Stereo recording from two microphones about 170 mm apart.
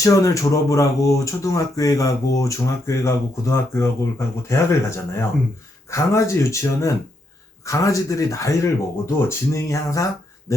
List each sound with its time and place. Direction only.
0.0 s speech: 20° left (ahead or behind)